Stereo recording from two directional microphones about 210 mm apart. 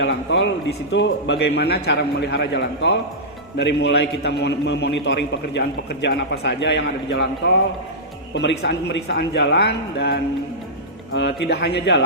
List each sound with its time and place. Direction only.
0.0 s a man's voice: 55° left (ahead or behind)
8.4 s a man's voice: 55° left (ahead or behind)